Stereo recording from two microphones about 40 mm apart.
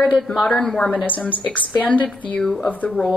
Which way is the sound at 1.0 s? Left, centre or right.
Left.